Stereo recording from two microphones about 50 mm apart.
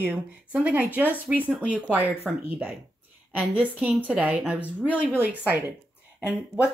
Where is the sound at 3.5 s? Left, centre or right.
Right.